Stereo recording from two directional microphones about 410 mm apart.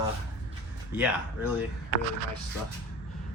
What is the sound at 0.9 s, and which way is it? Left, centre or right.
Speech, centre.